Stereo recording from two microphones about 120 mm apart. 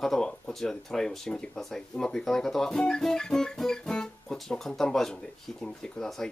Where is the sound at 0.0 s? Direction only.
5° left (ahead or behind).